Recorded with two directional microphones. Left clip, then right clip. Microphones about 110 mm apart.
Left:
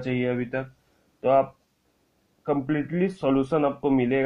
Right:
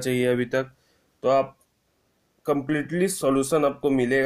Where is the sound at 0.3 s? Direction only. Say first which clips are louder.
Right 5 dB; 80° right.